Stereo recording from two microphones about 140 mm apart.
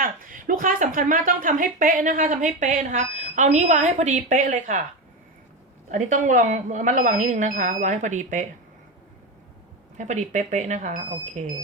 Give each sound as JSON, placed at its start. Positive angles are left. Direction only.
{"t": 0.0, "sound": "a woman's voice", "side_deg": -75}
{"t": 5.9, "sound": "speech", "side_deg": -65}
{"t": 10.0, "sound": "speech", "side_deg": -60}